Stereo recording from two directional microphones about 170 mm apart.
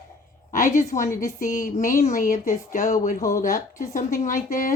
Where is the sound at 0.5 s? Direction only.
50° left (ahead or behind).